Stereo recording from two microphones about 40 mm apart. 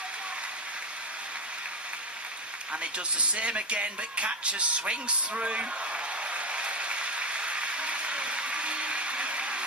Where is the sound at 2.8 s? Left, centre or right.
Right.